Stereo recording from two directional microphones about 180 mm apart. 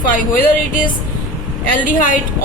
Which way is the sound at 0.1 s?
50° left (ahead or behind).